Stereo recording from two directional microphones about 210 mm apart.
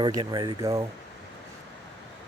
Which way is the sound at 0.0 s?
20° right (ahead or behind).